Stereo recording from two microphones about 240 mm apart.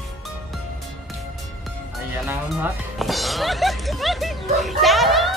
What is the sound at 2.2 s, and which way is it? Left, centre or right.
Music, centre.